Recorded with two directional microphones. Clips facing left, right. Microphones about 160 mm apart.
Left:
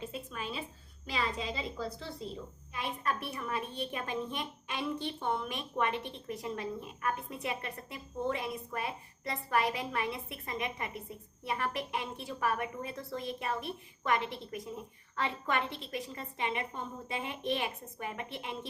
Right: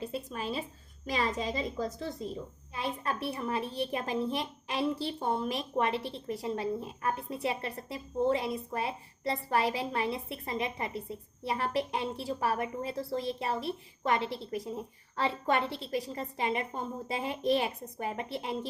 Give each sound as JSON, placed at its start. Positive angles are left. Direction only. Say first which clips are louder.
{"t": 0.0, "sound": "a sound", "louder": "right 4 dB", "side_deg": -35}
{"t": 1.0, "sound": "a woman's voice", "louder": "right 4 dB", "side_deg": -40}
{"t": 2.7, "sound": "a woman's voice", "louder": "right 1 dB", "side_deg": -30}